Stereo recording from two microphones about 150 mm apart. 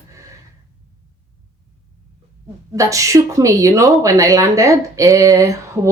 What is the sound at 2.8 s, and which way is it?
Speech, 20° right (ahead or behind).